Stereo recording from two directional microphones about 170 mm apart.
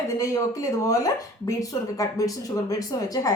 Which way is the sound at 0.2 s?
20° left (ahead or behind).